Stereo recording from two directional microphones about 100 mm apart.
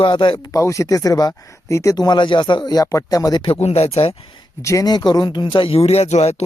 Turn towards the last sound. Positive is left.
turn(degrees=90)